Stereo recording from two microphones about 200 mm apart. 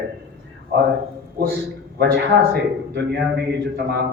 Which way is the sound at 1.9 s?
50° right (ahead or behind).